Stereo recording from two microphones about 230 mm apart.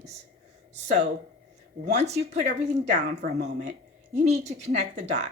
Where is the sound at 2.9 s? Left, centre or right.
Right.